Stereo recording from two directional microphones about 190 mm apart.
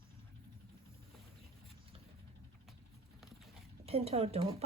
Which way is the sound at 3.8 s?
30° right (ahead or behind).